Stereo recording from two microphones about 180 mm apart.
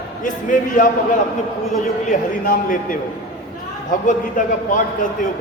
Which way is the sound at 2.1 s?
50° left (ahead or behind).